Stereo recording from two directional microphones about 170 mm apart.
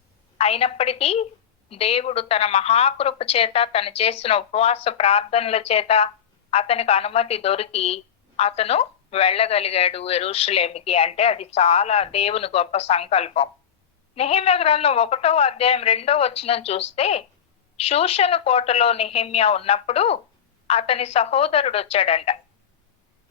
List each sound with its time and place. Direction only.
0.3 s a woman's voice: 35° left (ahead or behind)